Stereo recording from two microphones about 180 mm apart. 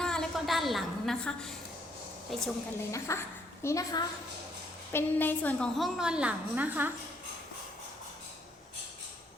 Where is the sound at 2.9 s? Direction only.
15° left (ahead or behind); by 6.9 s 10° right (ahead or behind).